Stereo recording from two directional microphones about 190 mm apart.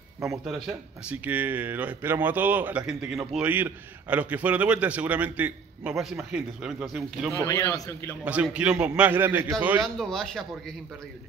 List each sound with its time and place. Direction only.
0.5 s speech: 5° right (ahead or behind)
7.4 s a man's voice: 15° left (ahead or behind)
8.2 s speech: 5° right (ahead or behind)
9.8 s a man's voice: 5° left (ahead or behind)